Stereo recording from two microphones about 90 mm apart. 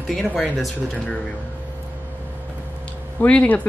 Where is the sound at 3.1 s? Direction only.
15° left (ahead or behind).